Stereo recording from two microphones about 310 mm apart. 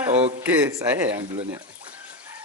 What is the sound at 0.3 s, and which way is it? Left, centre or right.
Speech, centre.